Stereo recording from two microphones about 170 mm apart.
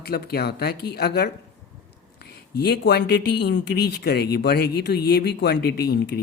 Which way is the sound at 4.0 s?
65° left (ahead or behind).